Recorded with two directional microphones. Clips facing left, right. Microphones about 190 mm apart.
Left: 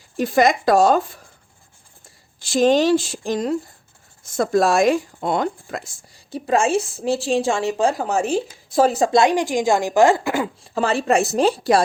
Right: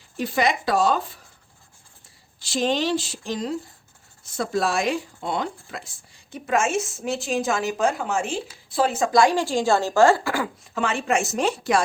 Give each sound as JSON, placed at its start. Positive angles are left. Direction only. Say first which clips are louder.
{"t": 0.2, "sound": "speech", "louder": "left 6 dB", "side_deg": 45}
{"t": 2.4, "sound": "a woman's voice", "louder": "left 7 dB", "side_deg": 45}
{"t": 9.1, "sound": "a woman's voice", "louder": "left 2 dB", "side_deg": 20}
{"t": 10.8, "sound": "a woman's voice", "louder": "left 5 dB", "side_deg": 35}